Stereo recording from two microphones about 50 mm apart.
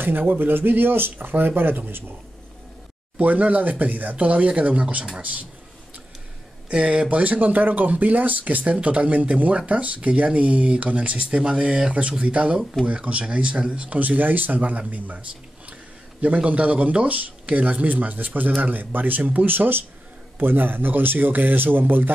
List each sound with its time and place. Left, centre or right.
0.3 s speech: right
3.2 s speech: right
6.7 s speech: right
16.4 s speech: right